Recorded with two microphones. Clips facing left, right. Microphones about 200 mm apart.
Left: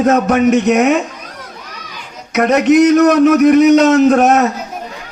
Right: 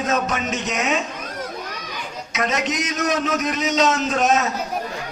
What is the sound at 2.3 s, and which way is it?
A man's voice, 60° left (ahead or behind).